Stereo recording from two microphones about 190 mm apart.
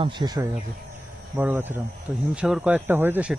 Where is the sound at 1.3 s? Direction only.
10° right (ahead or behind).